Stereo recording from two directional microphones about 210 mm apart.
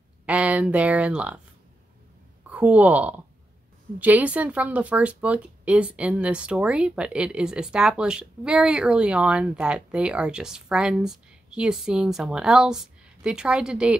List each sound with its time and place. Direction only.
0.3 s speech: 5° right (ahead or behind)
2.4 s speech: 5° right (ahead or behind)